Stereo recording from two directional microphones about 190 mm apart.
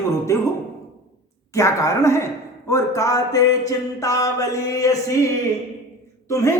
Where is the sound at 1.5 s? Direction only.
15° left (ahead or behind).